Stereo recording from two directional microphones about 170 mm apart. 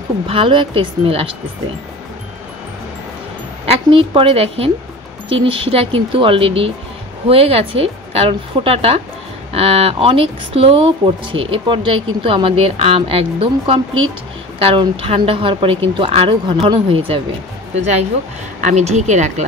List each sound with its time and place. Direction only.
0.3 s speech: 30° right (ahead or behind)
3.6 s speech: 35° right (ahead or behind)